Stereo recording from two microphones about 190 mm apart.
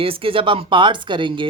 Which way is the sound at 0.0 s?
30° right (ahead or behind).